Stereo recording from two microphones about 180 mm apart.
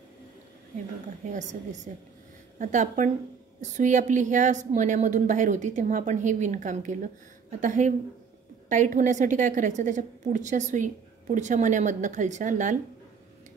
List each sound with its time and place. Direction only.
1.3 s a woman's voice: 45° right (ahead or behind)